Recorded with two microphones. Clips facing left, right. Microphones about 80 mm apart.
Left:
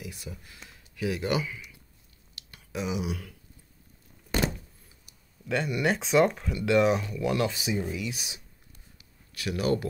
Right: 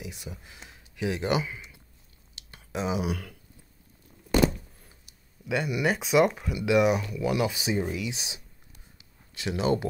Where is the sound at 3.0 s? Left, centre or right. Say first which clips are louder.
Right 3 dB; right.